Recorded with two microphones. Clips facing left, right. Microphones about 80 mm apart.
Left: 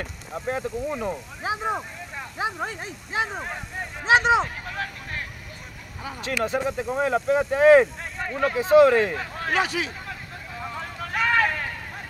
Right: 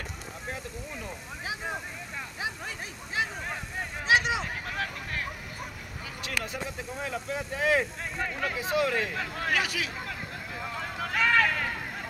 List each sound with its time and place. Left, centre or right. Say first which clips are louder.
0.5 s speech: left 12 dB; left
1.4 s speech: left 8 dB; left
6.0 s speech: left 9 dB; left
6.9 s speech: left 13 dB; left
9.1 s speech: left 4 dB; left
11.1 s a sound: left 2 dB; centre